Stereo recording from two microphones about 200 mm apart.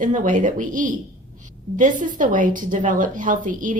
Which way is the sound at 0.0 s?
40° right (ahead or behind).